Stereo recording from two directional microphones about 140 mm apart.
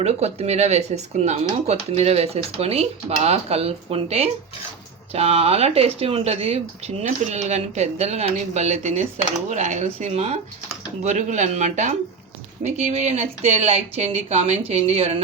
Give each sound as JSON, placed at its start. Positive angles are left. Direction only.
{"t": 0.0, "sound": "speech", "side_deg": -50}